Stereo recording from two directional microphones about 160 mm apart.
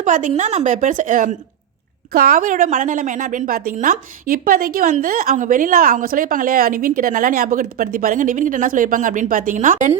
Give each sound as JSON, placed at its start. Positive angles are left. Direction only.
{"t": 0.0, "sound": "a woman's voice", "side_deg": -55}